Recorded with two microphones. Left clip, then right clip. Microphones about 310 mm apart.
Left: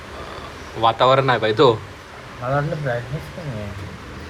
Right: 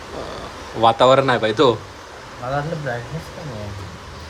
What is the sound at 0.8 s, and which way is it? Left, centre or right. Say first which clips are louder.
Speech: right 2 dB; centre.